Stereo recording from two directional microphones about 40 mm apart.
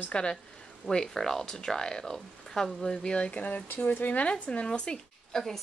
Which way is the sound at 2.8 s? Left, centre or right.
Left.